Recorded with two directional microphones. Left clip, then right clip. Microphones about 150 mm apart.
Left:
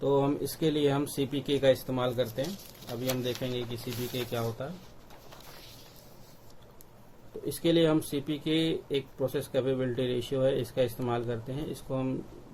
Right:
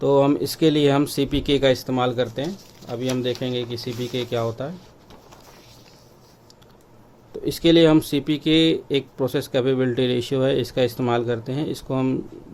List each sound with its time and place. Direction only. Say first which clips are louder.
0.0 s speech: right 9 dB; 65° right (ahead or behind)
7.4 s speech: right 10 dB; 60° right (ahead or behind)